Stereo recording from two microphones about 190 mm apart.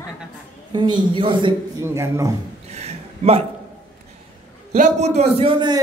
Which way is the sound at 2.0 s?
15° right (ahead or behind).